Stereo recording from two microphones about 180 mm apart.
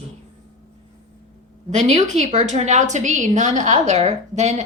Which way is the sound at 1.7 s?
40° right (ahead or behind).